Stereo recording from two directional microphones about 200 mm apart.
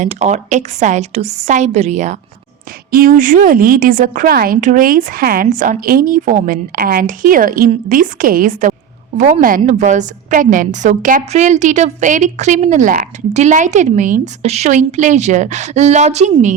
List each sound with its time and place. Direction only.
0.0 s a woman's voice: 35° right (ahead or behind)